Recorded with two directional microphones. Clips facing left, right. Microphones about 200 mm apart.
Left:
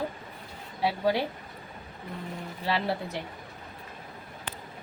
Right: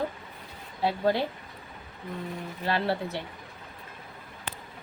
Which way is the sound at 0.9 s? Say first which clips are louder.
Right 1 dB; 10° left (ahead or behind).